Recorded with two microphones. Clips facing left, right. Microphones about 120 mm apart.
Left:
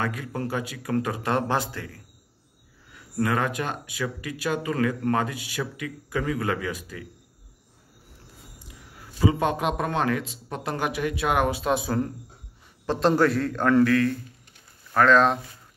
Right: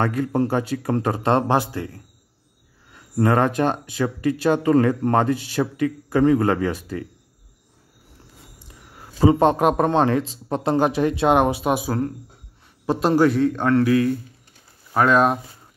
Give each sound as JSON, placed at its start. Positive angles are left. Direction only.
{"t": 0.0, "sound": "speech", "side_deg": -40}
{"t": 2.9, "sound": "speech", "side_deg": -40}
{"t": 9.2, "sound": "speech", "side_deg": -35}
{"t": 9.6, "sound": "a man's voice", "side_deg": -45}
{"t": 9.8, "sound": "speech", "side_deg": -30}
{"t": 11.7, "sound": "a man's voice", "side_deg": -5}
{"t": 13.8, "sound": "speech", "side_deg": -15}